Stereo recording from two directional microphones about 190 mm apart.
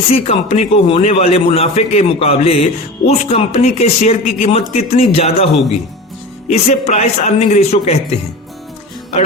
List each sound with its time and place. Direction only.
0.1 s a man's voice: 35° left (ahead or behind)
6.5 s a man's voice: 35° left (ahead or behind)